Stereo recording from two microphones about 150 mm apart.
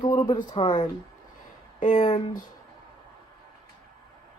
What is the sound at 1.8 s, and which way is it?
Speech, 60° left (ahead or behind).